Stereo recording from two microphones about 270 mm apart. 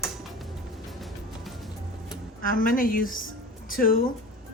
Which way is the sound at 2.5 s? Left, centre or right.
Left.